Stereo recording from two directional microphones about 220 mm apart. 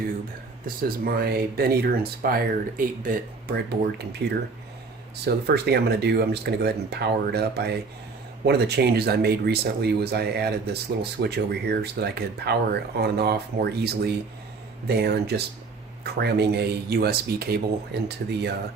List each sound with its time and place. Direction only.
0.8 s speech: 45° right (ahead or behind)